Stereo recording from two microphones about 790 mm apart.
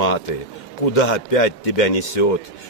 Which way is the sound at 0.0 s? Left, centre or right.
Left.